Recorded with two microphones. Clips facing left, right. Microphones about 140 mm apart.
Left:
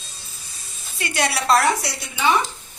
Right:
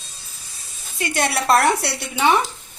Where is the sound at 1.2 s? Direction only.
50° right (ahead or behind).